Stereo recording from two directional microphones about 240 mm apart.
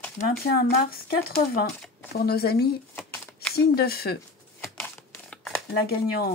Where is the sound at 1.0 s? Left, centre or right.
Left.